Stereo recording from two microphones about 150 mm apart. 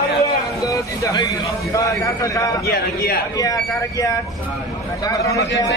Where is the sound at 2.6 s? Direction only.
90° left.